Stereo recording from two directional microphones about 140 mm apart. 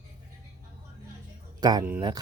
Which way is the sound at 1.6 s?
30° right (ahead or behind).